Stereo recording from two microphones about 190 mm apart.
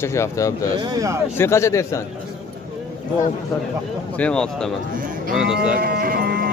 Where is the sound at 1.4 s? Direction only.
15° left (ahead or behind).